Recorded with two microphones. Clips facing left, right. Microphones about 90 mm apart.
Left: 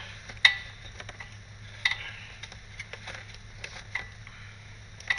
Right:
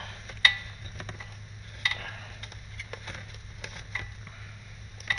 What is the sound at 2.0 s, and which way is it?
Tick-tock, 35° right (ahead or behind).